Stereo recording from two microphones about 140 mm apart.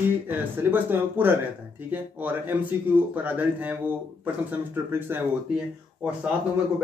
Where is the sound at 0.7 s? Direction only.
15° right (ahead or behind).